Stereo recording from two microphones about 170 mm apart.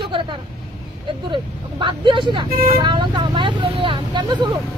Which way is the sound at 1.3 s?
30° right (ahead or behind).